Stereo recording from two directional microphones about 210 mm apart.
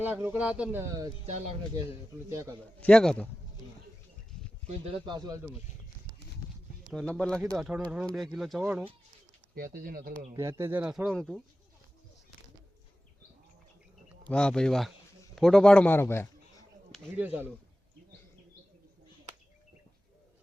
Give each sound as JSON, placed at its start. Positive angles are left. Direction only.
{"t": 0.0, "sound": "speech", "side_deg": -10}
{"t": 2.3, "sound": "speech", "side_deg": -15}
{"t": 2.8, "sound": "speech", "side_deg": 5}
{"t": 4.6, "sound": "speech", "side_deg": -25}
{"t": 6.8, "sound": "speech", "side_deg": 0}
{"t": 9.7, "sound": "speech", "side_deg": -45}
{"t": 10.3, "sound": "speech", "side_deg": -10}
{"t": 14.3, "sound": "a man's voice", "side_deg": 5}
{"t": 16.9, "sound": "speech", "side_deg": -5}